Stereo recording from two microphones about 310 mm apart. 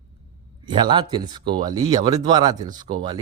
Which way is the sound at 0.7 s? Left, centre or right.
Centre.